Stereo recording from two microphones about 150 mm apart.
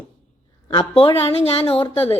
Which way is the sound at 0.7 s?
35° left (ahead or behind).